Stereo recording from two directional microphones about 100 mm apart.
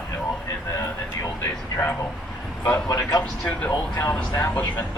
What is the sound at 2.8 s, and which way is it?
Speech, 40° left (ahead or behind).